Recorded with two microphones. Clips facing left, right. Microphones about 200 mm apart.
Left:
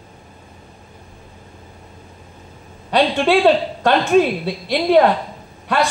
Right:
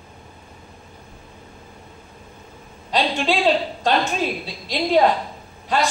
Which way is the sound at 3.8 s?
60° left (ahead or behind).